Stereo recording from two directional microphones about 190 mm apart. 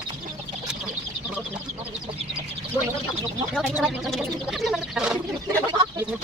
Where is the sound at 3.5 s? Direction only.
Centre (ahead or behind).